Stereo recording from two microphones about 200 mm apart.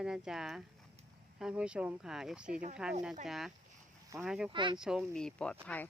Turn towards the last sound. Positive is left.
turn(degrees=10)  # may be behind; listen again after turning